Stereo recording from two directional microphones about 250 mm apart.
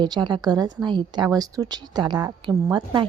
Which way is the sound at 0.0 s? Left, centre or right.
Centre.